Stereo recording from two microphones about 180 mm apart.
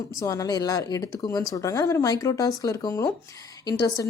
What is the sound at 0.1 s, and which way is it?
Speech, 20° left (ahead or behind).